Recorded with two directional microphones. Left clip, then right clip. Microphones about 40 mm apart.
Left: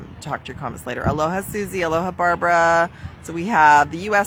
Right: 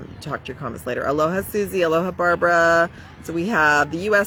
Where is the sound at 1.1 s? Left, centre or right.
Left.